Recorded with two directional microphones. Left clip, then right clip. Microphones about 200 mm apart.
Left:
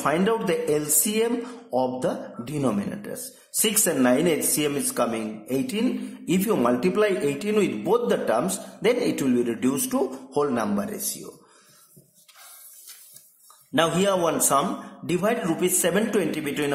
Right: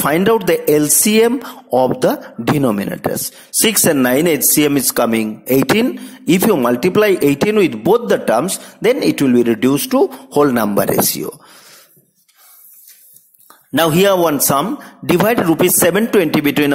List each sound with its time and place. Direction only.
0.0 s speech: 40° right (ahead or behind)
13.7 s speech: 40° right (ahead or behind)